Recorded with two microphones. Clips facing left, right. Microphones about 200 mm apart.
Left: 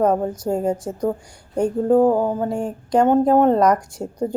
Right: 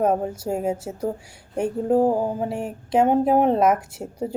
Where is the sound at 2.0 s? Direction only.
60° left (ahead or behind).